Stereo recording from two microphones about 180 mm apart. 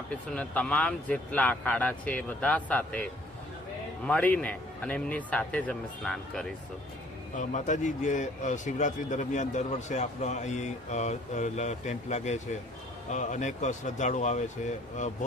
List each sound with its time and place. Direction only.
0.1 s speech: 5° left (ahead or behind)
4.0 s speech: 10° left (ahead or behind)
7.3 s a man's voice: 45° left (ahead or behind)